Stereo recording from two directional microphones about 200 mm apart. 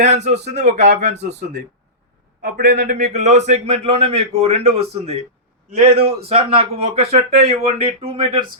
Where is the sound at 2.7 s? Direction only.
35° right (ahead or behind).